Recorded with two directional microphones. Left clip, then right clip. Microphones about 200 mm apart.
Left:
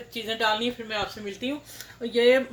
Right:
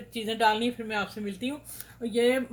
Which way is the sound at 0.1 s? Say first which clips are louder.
Right 1 dB; 55° right (ahead or behind).